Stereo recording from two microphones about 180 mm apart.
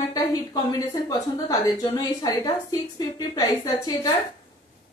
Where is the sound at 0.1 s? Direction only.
20° left (ahead or behind).